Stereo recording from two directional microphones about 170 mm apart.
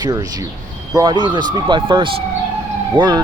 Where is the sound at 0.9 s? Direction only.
25° right (ahead or behind).